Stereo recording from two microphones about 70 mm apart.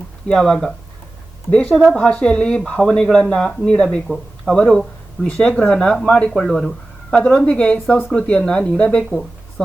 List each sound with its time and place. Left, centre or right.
0.3 s speech: centre
1.7 s speech: centre
2.0 s a woman's voice: centre
6.3 s speech: centre
7.2 s a woman's voice: left
9.0 s a sound: centre